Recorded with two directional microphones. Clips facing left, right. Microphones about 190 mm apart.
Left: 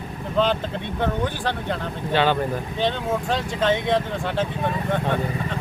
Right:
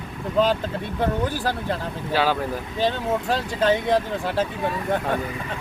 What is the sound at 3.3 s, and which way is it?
Speech, 35° right (ahead or behind).